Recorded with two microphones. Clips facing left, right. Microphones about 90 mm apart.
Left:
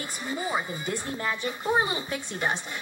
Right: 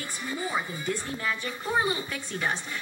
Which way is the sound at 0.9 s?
30° left (ahead or behind).